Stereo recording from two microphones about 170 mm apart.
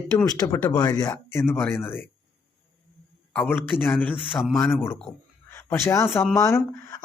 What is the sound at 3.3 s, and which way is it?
A man's voice, 10° left (ahead or behind).